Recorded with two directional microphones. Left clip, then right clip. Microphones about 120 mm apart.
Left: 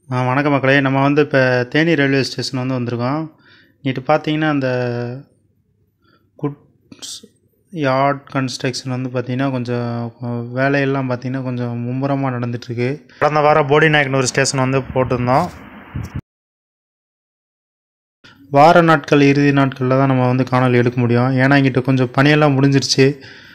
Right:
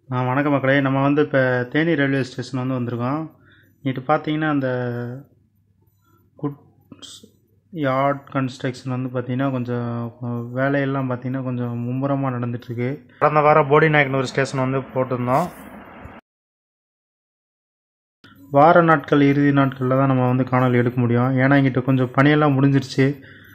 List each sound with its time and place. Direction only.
0.1 s speech: 30° left (ahead or behind)
6.4 s beatboxing: 25° left (ahead or behind)
7.7 s speech: 25° left (ahead or behind)
13.2 s a man's voice: 40° left (ahead or behind)
13.7 s speech: 30° left (ahead or behind)
18.5 s speech: 25° left (ahead or behind)